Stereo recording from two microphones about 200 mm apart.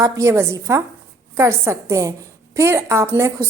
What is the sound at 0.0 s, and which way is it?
A woman's voice, 15° right (ahead or behind).